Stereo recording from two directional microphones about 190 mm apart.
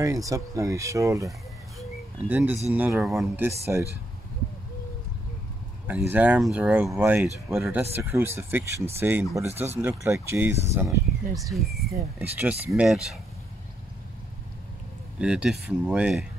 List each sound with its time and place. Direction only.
0.0 s speech: 15° right (ahead or behind)
1.8 s bird: 10° right (ahead or behind)
2.7 s speech: 10° right (ahead or behind)
3.4 s speech: 15° right (ahead or behind)
5.9 s speech: 10° right (ahead or behind)
11.3 s speech: centre (ahead or behind)
15.1 s speech: 5° right (ahead or behind)